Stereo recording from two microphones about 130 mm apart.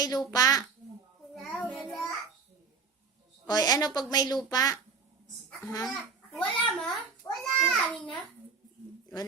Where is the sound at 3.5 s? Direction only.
30° left (ahead or behind).